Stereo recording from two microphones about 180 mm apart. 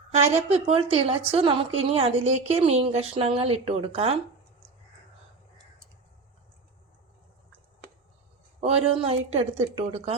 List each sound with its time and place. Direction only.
0.2 s speech: 35° right (ahead or behind)
8.6 s speech: 35° right (ahead or behind)